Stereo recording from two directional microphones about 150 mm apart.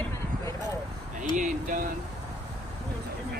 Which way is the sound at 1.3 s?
60° right (ahead or behind).